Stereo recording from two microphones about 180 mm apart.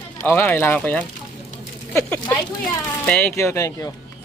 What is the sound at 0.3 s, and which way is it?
A man's voice, 10° left (ahead or behind).